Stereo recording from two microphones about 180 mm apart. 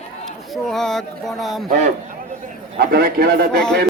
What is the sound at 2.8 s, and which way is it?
Speech, 55° right (ahead or behind).